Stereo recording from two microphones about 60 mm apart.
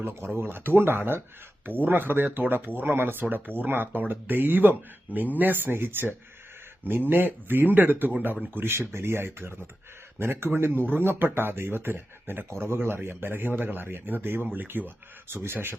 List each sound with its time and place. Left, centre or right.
0.0 s speech: right